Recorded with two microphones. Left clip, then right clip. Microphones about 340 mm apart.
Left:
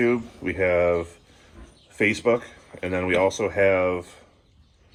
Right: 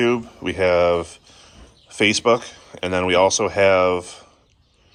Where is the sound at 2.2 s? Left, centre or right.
Right.